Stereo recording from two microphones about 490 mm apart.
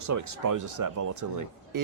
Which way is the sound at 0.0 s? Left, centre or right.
Right.